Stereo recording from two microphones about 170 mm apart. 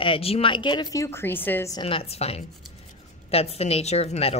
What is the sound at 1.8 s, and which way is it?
Speech, 35° left (ahead or behind).